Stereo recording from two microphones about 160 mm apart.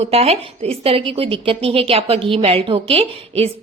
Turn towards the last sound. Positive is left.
turn(degrees=-35)  # may be behind; listen again after turning